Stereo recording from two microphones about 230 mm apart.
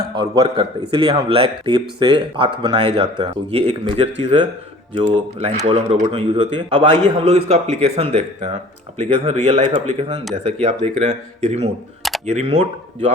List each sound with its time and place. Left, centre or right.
0.1 s a man's voice: centre